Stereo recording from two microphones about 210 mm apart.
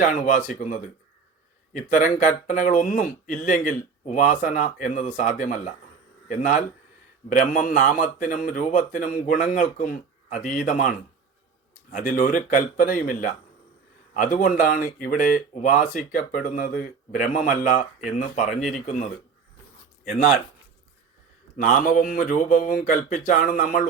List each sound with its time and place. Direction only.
0.0 s speech: 40° left (ahead or behind)
21.5 s speech: 40° left (ahead or behind)